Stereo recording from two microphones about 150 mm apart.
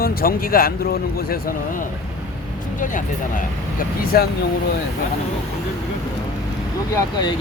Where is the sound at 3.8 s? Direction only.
85° left.